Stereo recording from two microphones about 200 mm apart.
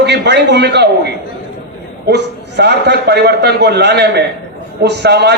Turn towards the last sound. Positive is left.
turn(degrees=-55)  # may be behind; listen again after turning